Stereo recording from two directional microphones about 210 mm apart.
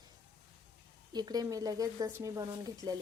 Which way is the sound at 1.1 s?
20° right (ahead or behind).